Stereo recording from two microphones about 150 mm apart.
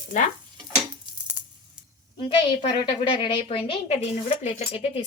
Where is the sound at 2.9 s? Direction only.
35° left (ahead or behind).